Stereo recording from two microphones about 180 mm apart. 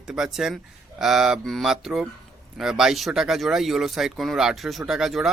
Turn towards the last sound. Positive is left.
turn(degrees=0)  # may be behind; listen again after turning